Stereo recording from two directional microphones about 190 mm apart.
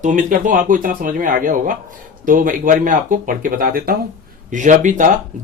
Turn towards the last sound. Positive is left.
turn(degrees=-40)  # may be behind; listen again after turning